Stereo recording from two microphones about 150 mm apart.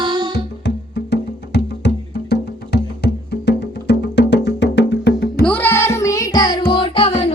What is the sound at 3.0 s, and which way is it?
Music, 90° left.